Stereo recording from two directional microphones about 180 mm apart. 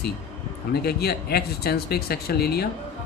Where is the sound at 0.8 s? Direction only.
60° left (ahead or behind).